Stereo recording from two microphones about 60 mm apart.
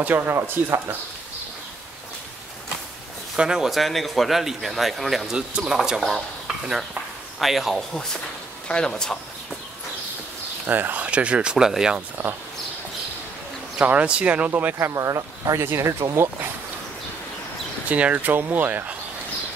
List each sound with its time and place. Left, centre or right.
0.0 s speech: right
0.3 s speech: right
3.3 s speech: centre
3.7 s a man's voice: centre
8.6 s speech: centre
10.7 s speech: right
11.5 s speech: centre
13.8 s speech: right
14.8 s speech: right
17.8 s speech: right